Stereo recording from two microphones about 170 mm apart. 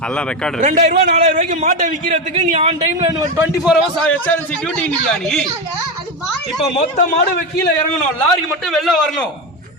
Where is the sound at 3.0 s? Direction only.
20° right (ahead or behind).